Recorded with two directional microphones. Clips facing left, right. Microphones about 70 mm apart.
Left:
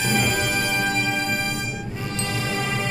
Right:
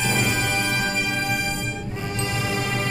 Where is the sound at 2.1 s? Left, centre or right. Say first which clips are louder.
Right 1 dB; centre.